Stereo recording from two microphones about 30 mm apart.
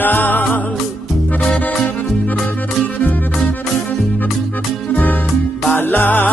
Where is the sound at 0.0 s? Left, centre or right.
Left.